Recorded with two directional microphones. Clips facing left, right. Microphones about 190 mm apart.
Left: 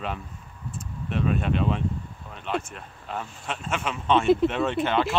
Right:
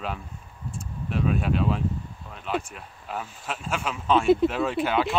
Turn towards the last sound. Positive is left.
turn(degrees=-5)  # may be behind; listen again after turning